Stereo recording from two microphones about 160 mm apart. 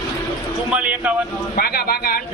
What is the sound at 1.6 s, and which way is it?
Speech, 70° left (ahead or behind).